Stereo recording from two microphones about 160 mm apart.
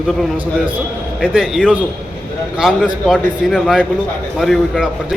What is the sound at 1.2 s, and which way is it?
A man's voice, 5° right (ahead or behind).